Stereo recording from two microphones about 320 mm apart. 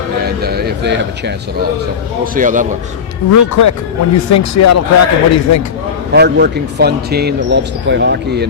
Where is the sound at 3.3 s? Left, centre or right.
Left.